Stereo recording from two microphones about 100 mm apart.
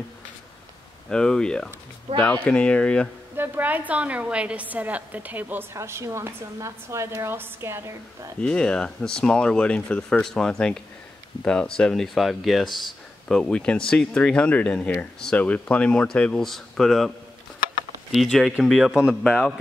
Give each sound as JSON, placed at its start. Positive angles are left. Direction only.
{"t": 1.0, "sound": "speech", "side_deg": 10}
{"t": 3.3, "sound": "a woman's voice", "side_deg": -15}
{"t": 8.4, "sound": "speech", "side_deg": 10}
{"t": 18.1, "sound": "speech", "side_deg": 0}